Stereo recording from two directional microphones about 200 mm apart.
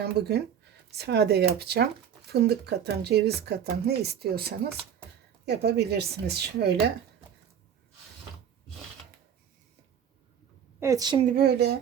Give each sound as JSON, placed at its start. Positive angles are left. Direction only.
{"t": 0.0, "sound": "speech", "side_deg": -55}
{"t": 10.8, "sound": "a woman's voice", "side_deg": -15}
{"t": 11.2, "sound": "speech", "side_deg": -45}